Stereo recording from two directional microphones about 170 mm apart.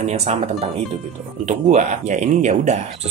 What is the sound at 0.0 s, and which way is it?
Speech, 40° right (ahead or behind).